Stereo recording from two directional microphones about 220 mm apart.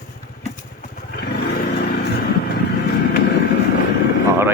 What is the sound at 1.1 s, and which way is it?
Roar, 45° left (ahead or behind).